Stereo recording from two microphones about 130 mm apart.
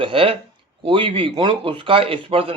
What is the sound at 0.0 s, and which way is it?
Speech, 45° right (ahead or behind).